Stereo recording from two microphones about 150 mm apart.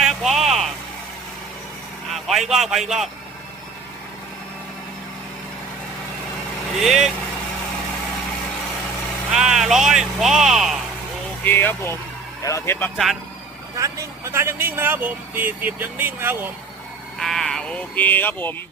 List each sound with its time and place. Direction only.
0.0 s vehicle: centre (ahead or behind)
2.1 s a man's voice: centre (ahead or behind)
6.7 s speech: centre (ahead or behind)
9.3 s speech: 5° right (ahead or behind)
11.4 s speech: 15° left (ahead or behind)
13.7 s speech: 20° right (ahead or behind)
17.2 s speech: centre (ahead or behind)